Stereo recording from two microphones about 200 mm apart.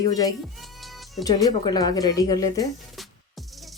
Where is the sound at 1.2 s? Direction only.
20° left (ahead or behind).